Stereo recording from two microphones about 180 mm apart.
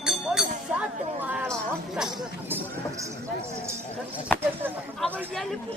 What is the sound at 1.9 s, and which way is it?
Music, centre (ahead or behind).